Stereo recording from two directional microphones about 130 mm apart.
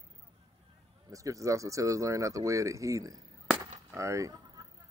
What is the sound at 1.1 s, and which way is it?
Speech, 25° right (ahead or behind).